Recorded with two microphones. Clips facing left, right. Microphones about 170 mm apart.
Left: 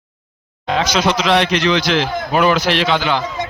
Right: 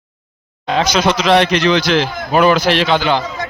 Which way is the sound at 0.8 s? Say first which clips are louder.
Right 2 dB; 45° right (ahead or behind).